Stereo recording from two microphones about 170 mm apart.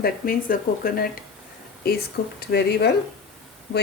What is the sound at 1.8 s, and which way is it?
Speech, 70° left (ahead or behind).